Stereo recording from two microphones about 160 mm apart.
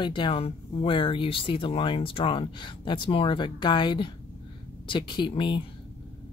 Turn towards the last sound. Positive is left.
turn(degrees=30)  # may be behind; listen again after turning